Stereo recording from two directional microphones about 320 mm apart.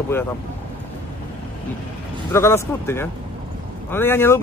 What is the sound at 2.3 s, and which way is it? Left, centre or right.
Speech, centre.